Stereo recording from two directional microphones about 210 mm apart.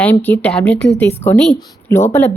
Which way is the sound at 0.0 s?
10° left (ahead or behind).